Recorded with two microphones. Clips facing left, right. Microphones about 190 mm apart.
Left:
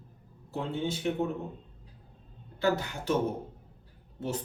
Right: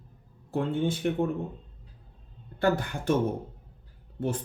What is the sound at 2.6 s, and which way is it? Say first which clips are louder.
Speech: right 3 dB; 50° right (ahead or behind).